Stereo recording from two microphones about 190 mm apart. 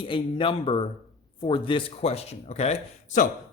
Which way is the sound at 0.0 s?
25° left (ahead or behind).